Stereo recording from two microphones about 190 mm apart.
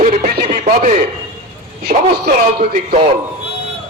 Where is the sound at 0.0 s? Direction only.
45° right (ahead or behind).